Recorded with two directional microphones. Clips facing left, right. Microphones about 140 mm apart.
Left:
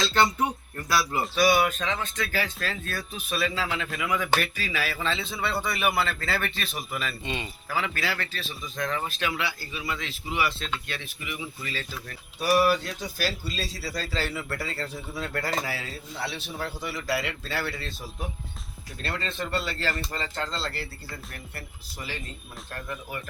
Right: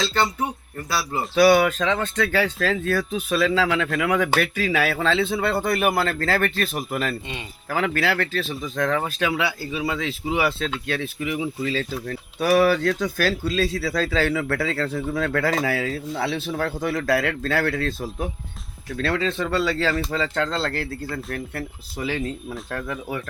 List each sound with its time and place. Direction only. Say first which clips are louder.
0.0 s speech: right 1 dB; centre (ahead or behind)
1.4 s a man's voice: right 7 dB; 90° right; by 9.4 s 70° right (ahead or behind)
10.3 s speech: right 5 dB; 90° right
12.0 s speech: right 3 dB; 75° right (ahead or behind)
17.6 s speech: right 10 dB; 55° right (ahead or behind)
18.9 s speech: right 9 dB; 90° right
21.3 s speech: right 11 dB; 90° right